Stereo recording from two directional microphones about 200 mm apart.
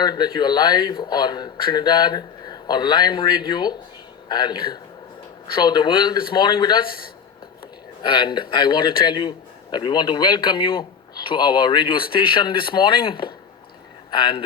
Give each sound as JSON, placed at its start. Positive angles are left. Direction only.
{"t": 0.0, "sound": "speech", "side_deg": 20}
{"t": 8.0, "sound": "speech", "side_deg": 25}